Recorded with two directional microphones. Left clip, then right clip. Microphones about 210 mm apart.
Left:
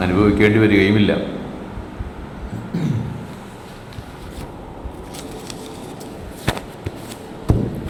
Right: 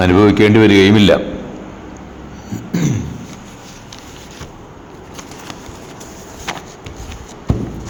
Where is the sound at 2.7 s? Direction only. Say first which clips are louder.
Right 6 dB; 45° right (ahead or behind).